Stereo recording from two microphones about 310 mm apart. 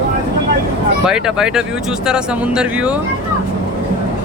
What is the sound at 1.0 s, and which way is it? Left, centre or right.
Speech, centre.